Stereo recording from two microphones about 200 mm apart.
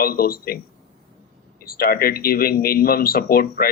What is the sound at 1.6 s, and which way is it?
Speech, 50° left (ahead or behind).